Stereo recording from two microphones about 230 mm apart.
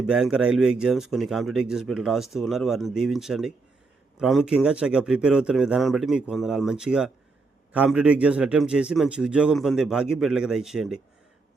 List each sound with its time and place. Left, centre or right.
0.0 s speech: centre